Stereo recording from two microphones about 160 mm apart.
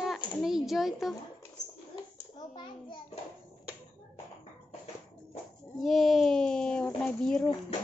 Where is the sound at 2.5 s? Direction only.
30° left (ahead or behind).